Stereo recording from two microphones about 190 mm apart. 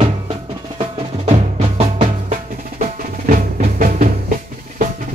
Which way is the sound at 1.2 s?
35° right (ahead or behind).